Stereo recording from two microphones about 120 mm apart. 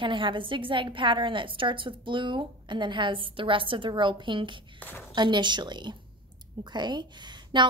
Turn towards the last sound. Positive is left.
turn(degrees=-40)  # may be behind; listen again after turning